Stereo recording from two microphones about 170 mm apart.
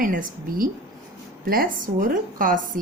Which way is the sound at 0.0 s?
55° right (ahead or behind).